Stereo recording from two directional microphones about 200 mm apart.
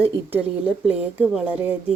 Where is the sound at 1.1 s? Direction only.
5° right (ahead or behind).